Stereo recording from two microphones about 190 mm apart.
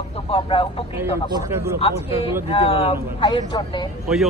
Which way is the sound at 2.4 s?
30° left (ahead or behind).